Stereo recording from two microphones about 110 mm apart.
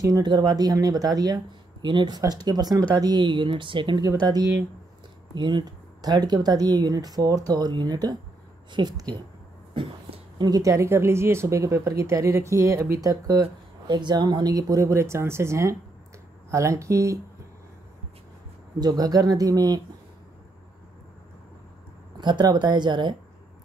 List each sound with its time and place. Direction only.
0.2 s speech: 40° right (ahead or behind)
4.0 s speech: 35° right (ahead or behind)
10.4 s speech: 35° right (ahead or behind)
18.8 s speech: 35° right (ahead or behind)
22.2 s speech: 40° right (ahead or behind)